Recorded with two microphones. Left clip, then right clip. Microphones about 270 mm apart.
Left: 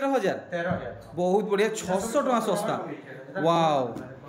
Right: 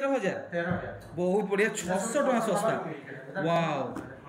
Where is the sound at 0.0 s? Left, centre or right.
Centre.